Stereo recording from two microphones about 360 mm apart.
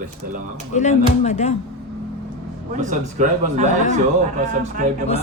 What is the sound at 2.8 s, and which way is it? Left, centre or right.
Speech, right.